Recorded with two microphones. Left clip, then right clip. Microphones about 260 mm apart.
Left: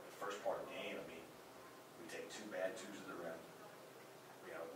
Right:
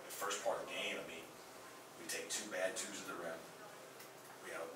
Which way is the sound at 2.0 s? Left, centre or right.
Centre.